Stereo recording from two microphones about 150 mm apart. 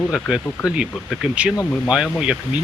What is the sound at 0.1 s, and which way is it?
Speech, 5° right (ahead or behind).